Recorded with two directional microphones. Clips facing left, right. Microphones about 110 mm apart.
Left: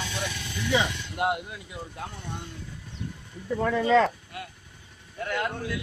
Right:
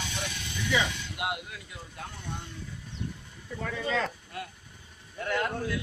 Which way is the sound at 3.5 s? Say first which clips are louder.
Left 10 dB; 60° left (ahead or behind).